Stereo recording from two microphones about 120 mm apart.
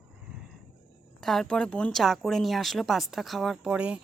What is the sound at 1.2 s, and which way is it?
A woman's voice, centre (ahead or behind).